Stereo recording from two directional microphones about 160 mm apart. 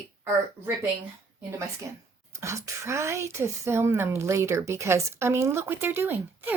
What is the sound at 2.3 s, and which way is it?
Speech, 20° right (ahead or behind).